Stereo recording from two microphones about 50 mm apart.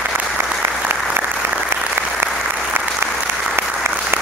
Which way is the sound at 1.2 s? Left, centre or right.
Right.